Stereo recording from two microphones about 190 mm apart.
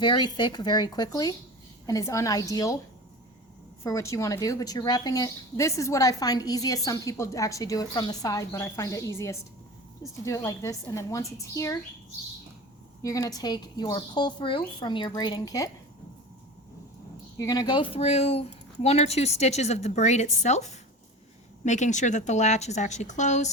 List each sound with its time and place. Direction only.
0.0 s a woman's voice: 25° left (ahead or behind)
3.8 s a woman's voice: 15° left (ahead or behind)
13.0 s speech: 15° left (ahead or behind)
17.3 s speech: 20° left (ahead or behind); by 23.5 s 40° left (ahead or behind)